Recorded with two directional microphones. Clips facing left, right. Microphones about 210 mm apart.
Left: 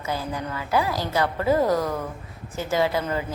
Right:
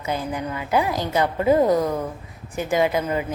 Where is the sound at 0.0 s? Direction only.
20° right (ahead or behind).